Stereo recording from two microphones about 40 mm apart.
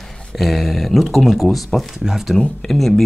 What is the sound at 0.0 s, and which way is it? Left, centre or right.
Speech, centre.